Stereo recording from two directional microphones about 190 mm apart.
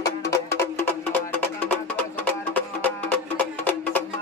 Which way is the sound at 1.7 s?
10° left (ahead or behind).